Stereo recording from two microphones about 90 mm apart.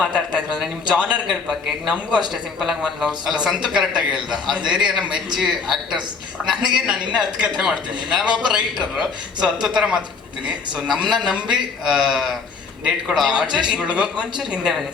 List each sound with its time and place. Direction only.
0.0 s speech: 10° right (ahead or behind)